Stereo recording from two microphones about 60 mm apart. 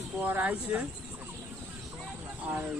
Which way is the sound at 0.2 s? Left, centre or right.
Right.